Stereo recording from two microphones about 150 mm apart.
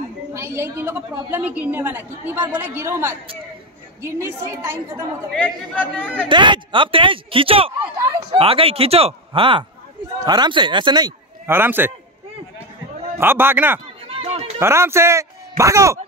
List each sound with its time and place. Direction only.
0.3 s a woman's voice: 15° right (ahead or behind)
5.3 s speech: 10° left (ahead or behind)
6.2 s speech: 30° right (ahead or behind)
11.4 s a woman's voice: 15° right (ahead or behind)
13.2 s a woman's voice: 15° right (ahead or behind)
14.0 s a sound: 40° right (ahead or behind)
14.6 s speech: 15° right (ahead or behind)